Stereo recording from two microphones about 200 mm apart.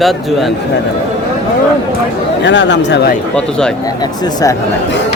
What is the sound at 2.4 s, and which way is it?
Speech, 60° left (ahead or behind).